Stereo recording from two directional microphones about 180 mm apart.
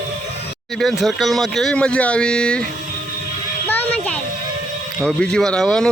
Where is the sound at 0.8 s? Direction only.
Centre (ahead or behind).